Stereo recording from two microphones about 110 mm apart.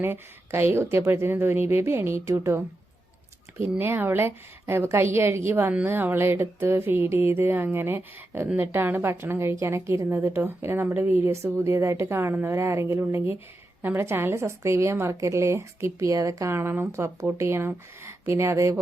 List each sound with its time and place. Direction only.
0.0 s a woman's voice: 20° right (ahead or behind)
3.8 s a woman's voice: 20° right (ahead or behind)